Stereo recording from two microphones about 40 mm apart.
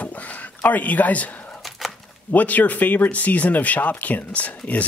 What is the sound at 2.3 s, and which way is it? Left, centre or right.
Speech, left.